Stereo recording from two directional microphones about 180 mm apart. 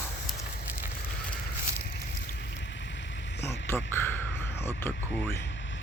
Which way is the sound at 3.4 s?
10° left (ahead or behind).